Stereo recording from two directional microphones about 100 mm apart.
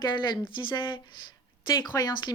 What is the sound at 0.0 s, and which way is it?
Speech, 50° left (ahead or behind).